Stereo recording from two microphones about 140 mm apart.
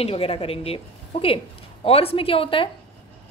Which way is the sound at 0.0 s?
45° left (ahead or behind).